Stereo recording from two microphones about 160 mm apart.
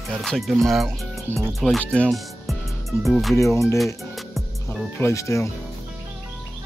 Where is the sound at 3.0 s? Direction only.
Centre (ahead or behind).